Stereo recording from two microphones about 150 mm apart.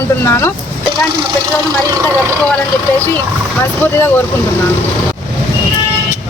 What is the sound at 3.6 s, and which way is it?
Speech, 15° left (ahead or behind).